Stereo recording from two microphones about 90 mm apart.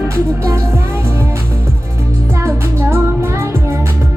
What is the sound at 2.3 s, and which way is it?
Music, 30° right (ahead or behind).